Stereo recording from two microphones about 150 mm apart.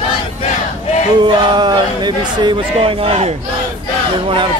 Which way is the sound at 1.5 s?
30° right (ahead or behind).